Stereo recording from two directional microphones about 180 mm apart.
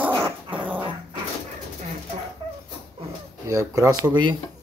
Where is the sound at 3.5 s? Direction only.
15° right (ahead or behind).